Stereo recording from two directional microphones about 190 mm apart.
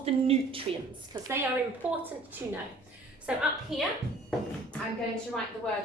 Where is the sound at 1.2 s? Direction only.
10° right (ahead or behind).